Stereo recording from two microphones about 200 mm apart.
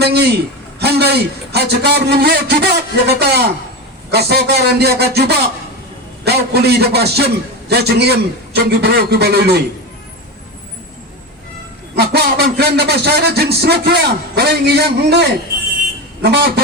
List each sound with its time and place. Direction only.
0.0 s a man's voice: 55° right (ahead or behind)
11.9 s a man's voice: 55° right (ahead or behind)